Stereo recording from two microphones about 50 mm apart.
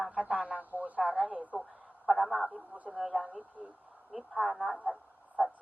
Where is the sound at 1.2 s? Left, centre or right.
Right.